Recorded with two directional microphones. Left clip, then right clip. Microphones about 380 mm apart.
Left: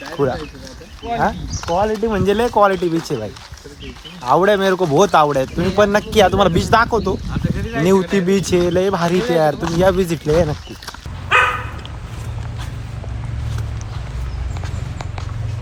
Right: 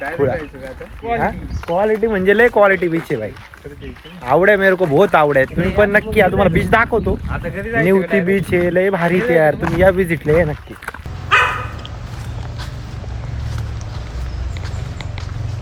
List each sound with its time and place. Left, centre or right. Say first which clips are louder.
0.2 s speech: right 1 dB; centre
1.0 s speech: even; centre
4.3 s speech: right 2 dB; centre